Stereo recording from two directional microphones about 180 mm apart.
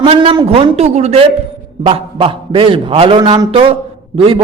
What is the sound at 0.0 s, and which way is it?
A man's voice, 30° right (ahead or behind).